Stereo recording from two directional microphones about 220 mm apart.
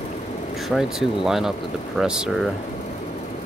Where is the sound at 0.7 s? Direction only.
Centre (ahead or behind).